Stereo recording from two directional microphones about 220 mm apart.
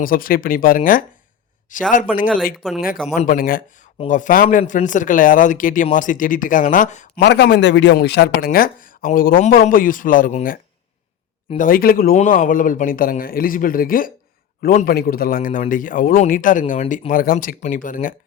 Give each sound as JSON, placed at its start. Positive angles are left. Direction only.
{"t": 0.0, "sound": "a man's voice", "side_deg": 40}
{"t": 2.2, "sound": "speech", "side_deg": -5}
{"t": 3.2, "sound": "a man's voice", "side_deg": 40}
{"t": 3.9, "sound": "a man's voice", "side_deg": 30}
{"t": 7.2, "sound": "a man's voice", "side_deg": 50}